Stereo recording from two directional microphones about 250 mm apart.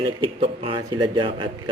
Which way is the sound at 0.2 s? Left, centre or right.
Right.